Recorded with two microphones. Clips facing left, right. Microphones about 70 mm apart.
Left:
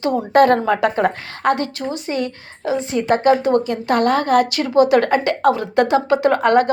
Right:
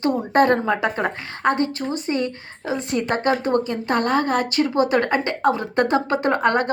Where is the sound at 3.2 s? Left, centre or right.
Right.